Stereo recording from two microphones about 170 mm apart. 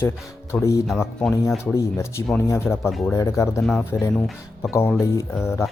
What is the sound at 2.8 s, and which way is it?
Speech, 5° right (ahead or behind).